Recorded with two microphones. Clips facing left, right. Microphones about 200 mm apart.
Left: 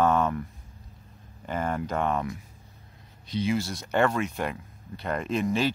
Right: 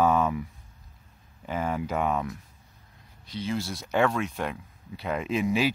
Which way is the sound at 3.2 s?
20° left (ahead or behind).